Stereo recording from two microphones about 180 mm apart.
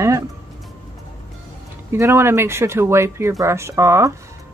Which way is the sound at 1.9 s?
15° right (ahead or behind).